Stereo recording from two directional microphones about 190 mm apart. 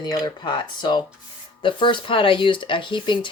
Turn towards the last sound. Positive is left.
turn(degrees=25)  # may be behind; listen again after turning